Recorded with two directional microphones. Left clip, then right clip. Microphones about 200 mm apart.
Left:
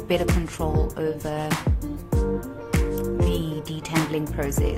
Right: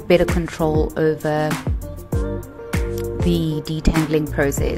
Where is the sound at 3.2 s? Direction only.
25° right (ahead or behind).